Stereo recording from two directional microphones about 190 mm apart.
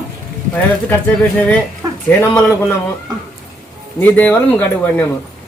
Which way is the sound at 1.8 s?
20° right (ahead or behind).